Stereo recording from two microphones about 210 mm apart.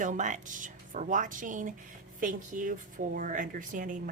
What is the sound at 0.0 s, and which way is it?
Speech, 35° right (ahead or behind).